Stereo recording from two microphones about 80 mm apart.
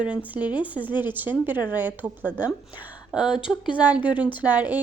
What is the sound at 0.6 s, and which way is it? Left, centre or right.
Speech, centre.